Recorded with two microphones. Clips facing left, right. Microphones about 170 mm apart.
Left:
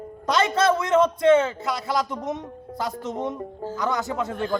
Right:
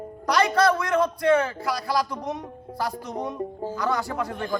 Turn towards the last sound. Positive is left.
turn(degrees=20)  # may be behind; listen again after turning